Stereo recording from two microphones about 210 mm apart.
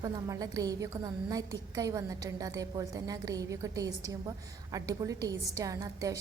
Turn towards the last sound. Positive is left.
turn(degrees=-15)  # may be behind; listen again after turning